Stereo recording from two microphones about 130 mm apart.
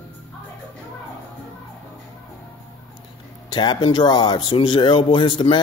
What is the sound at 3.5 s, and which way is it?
Speech, 35° left (ahead or behind).